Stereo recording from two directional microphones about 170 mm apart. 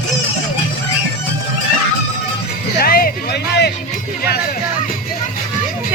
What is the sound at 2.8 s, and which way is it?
Music, 60° left (ahead or behind).